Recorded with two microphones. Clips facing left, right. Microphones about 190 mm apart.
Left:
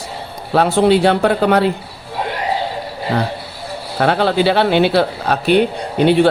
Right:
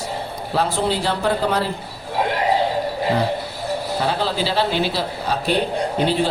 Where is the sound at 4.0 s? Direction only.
65° left (ahead or behind).